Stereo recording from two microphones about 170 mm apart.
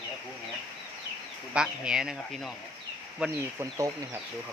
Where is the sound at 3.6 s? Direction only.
20° right (ahead or behind).